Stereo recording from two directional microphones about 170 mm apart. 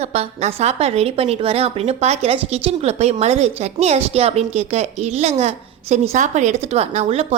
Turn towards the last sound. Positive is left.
turn(degrees=-35)  # may be behind; listen again after turning